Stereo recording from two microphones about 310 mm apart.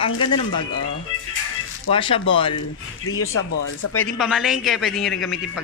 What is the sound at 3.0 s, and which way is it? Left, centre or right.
Speech, left.